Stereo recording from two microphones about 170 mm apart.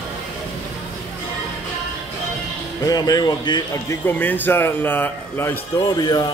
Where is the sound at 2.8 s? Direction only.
20° left (ahead or behind).